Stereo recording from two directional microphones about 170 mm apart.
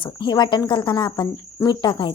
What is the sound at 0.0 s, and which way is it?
Speech, 25° left (ahead or behind).